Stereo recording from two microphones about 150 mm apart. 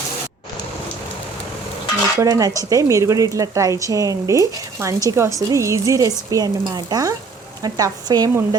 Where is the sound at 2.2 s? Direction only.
25° right (ahead or behind).